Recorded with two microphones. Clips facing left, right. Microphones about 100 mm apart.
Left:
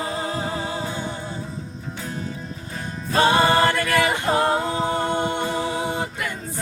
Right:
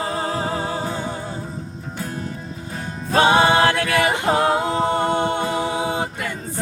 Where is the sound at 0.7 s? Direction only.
40° right (ahead or behind).